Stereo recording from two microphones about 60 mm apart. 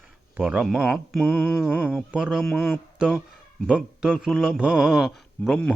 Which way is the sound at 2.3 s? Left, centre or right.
Centre.